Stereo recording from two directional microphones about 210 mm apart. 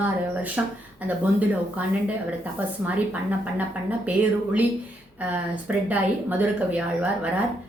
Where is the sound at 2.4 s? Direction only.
5° right (ahead or behind).